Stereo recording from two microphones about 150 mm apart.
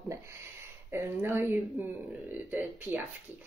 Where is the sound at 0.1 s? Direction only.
15° right (ahead or behind).